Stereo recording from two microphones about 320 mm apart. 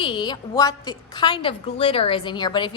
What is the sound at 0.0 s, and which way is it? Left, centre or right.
A woman's voice, centre.